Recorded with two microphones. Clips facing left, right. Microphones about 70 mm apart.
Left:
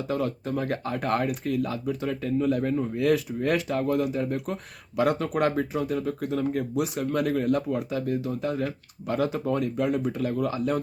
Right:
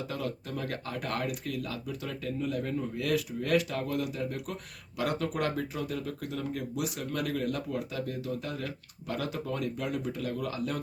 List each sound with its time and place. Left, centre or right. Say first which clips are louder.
0.1 s speech: left 8 dB; left
2.4 s speech: left 7 dB; left
3.1 s speech: left 3 dB; left